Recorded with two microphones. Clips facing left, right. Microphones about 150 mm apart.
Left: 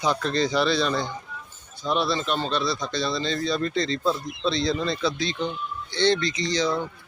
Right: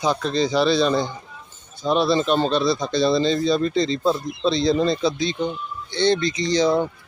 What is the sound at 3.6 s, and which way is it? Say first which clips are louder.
Speech: right 5 dB; 15° right (ahead or behind).